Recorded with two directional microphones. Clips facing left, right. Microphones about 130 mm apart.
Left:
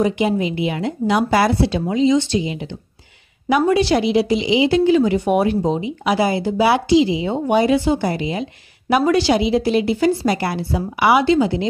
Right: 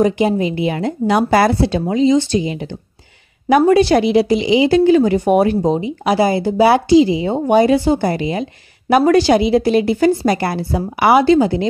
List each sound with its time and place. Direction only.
0.0 s speech: 40° right (ahead or behind)